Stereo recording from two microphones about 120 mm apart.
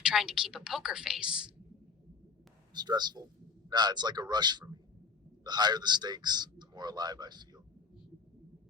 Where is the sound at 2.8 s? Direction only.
35° right (ahead or behind).